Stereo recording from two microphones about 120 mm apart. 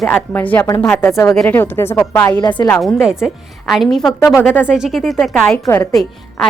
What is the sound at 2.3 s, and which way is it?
Speech, 40° left (ahead or behind).